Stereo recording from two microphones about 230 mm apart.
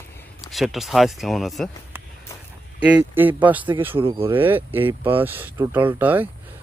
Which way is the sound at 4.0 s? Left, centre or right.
Right.